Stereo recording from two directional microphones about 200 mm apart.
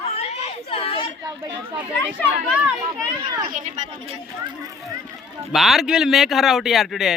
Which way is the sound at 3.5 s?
40° right (ahead or behind).